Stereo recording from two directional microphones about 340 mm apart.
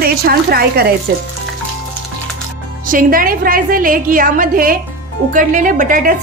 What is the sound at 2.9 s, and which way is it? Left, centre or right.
A woman's voice, right.